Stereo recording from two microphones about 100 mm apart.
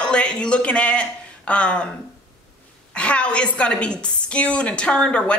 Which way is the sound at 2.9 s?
10° left (ahead or behind).